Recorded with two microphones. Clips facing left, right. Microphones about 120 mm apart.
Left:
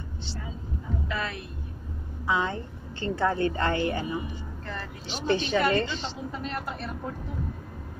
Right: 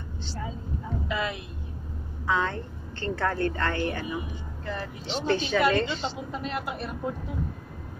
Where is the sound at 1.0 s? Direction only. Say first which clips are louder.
Right 4 dB; 15° right (ahead or behind).